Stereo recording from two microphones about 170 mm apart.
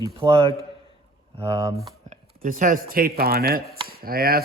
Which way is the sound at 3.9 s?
60° right (ahead or behind).